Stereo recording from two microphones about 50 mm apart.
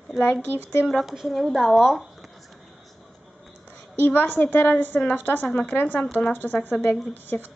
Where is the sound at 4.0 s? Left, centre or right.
Left.